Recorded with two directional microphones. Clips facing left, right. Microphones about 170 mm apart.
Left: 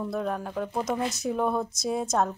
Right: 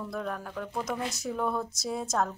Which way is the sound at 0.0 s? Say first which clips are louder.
Left 5 dB; 25° left (ahead or behind).